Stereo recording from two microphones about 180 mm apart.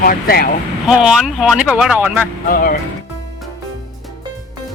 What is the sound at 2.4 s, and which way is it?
Speech, 50° left (ahead or behind).